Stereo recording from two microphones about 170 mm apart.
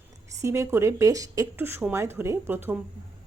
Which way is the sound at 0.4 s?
15° right (ahead or behind).